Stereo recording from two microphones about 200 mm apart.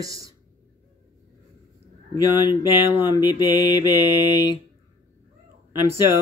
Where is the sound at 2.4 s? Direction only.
10° right (ahead or behind).